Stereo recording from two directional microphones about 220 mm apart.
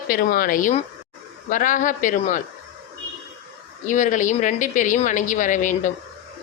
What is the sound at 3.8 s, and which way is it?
Speech, 35° left (ahead or behind).